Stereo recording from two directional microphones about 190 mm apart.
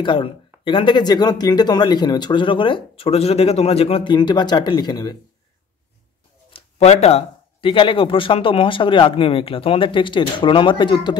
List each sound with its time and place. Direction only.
0.0 s speech: 25° left (ahead or behind)
6.5 s speech: 35° left (ahead or behind)